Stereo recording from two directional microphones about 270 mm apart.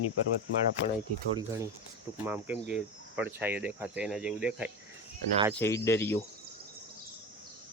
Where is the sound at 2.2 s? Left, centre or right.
Centre.